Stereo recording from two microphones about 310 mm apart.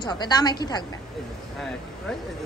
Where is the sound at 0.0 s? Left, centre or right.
Centre.